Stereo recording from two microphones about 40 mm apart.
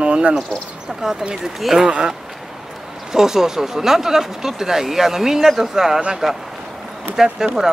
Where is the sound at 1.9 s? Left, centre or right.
Right.